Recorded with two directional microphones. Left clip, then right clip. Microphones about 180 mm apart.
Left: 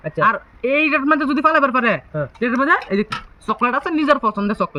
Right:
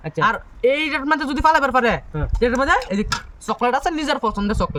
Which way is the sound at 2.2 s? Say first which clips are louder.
Even; 35° right (ahead or behind).